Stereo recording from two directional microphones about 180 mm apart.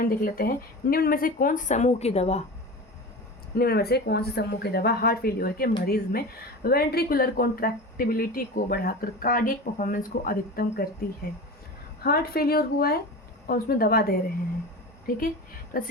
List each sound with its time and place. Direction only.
0.0 s a woman's voice: 50° left (ahead or behind); by 2.4 s 35° left (ahead or behind)
3.5 s a woman's voice: 60° left (ahead or behind)
12.0 s speech: 55° left (ahead or behind)
15.7 s a woman's voice: 50° left (ahead or behind)